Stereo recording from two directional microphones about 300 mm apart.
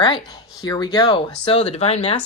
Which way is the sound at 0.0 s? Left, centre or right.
Centre.